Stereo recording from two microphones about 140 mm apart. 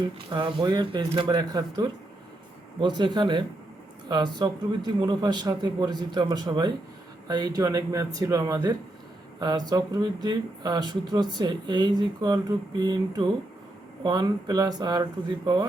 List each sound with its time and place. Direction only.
0.0 s a man's voice: 35° right (ahead or behind)